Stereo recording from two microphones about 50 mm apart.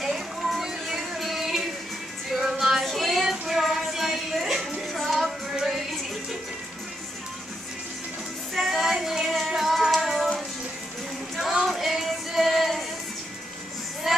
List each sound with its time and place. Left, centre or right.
0.0 s music: centre
2.8 s child singing: centre
4.8 s music: centre
8.5 s music: centre
11.6 s female singing: centre
14.0 s music: centre